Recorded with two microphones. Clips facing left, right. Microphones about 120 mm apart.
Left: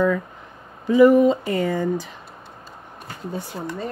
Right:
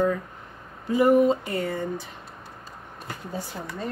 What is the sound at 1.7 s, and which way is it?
Speech, 90° left.